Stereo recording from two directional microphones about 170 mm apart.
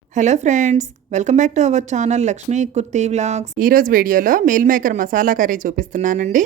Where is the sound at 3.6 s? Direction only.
55° right (ahead or behind).